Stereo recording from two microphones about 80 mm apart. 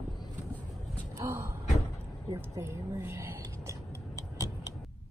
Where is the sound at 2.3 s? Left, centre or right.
Right.